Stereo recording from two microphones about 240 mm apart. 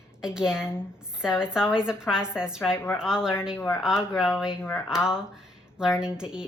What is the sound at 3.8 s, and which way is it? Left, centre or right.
Speech, centre.